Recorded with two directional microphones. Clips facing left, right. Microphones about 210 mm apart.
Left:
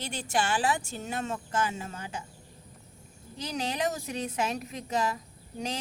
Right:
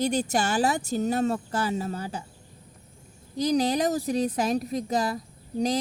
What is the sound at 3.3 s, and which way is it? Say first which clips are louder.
Speech: right 10 dB; 35° right (ahead or behind).